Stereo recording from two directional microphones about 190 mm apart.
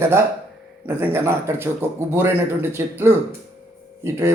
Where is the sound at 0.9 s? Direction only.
10° right (ahead or behind).